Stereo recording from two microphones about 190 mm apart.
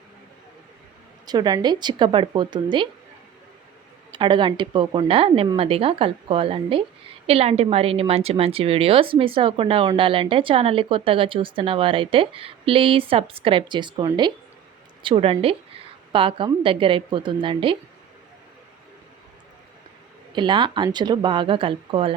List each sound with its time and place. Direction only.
1.3 s speech: 20° right (ahead or behind)
4.2 s speech: 25° right (ahead or behind)
20.3 s speech: 25° right (ahead or behind)